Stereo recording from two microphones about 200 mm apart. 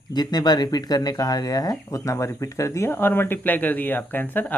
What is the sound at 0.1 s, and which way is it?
Speech, 20° left (ahead or behind).